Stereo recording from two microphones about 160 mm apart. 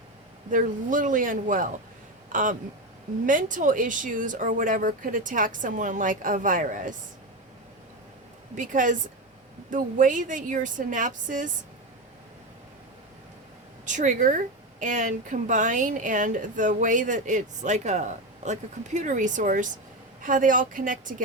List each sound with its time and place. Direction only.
0.5 s speech: 55° right (ahead or behind)
8.5 s speech: 55° right (ahead or behind)
13.8 s speech: 50° right (ahead or behind)